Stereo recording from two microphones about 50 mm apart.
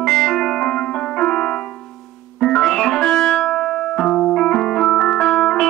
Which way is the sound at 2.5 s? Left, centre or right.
Centre.